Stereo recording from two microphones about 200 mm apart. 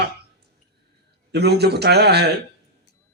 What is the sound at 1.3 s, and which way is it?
Speech, 55° right (ahead or behind).